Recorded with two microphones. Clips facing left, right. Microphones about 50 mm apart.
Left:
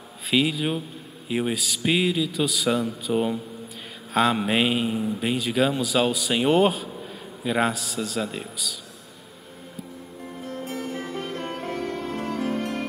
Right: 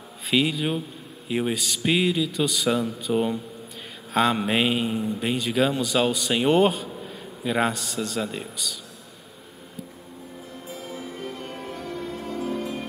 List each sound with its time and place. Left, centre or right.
0.3 s a man's voice: centre
10.4 s music: left